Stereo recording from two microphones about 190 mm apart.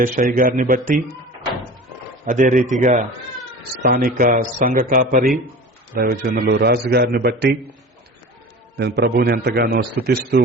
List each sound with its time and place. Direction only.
0.0 s speech: 45° right (ahead or behind)
2.2 s a man's voice: 40° right (ahead or behind)
3.8 s a man's voice: 55° right (ahead or behind)
8.7 s a man's voice: 60° right (ahead or behind)